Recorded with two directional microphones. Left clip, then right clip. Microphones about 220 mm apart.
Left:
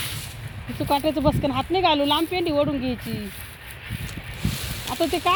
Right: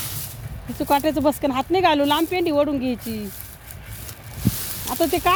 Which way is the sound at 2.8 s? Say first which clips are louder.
Right 2 dB; 45° right (ahead or behind).